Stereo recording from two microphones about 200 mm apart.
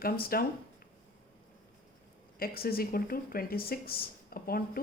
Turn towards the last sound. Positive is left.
turn(degrees=50)  # may be behind; listen again after turning